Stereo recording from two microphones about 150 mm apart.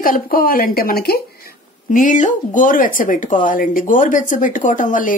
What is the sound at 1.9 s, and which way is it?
Speech, 60° left (ahead or behind).